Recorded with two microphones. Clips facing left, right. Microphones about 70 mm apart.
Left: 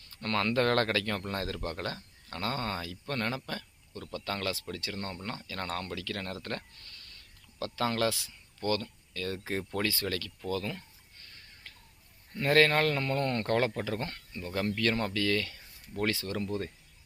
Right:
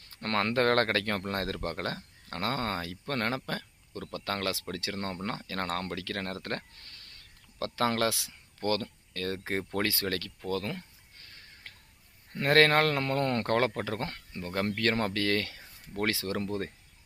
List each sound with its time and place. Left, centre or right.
0.4 s speech: right
8.3 s speech: right
11.6 s a sound: right
12.3 s speech: right
13.4 s speech: right